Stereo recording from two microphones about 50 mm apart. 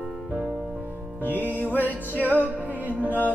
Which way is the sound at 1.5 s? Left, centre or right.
Left.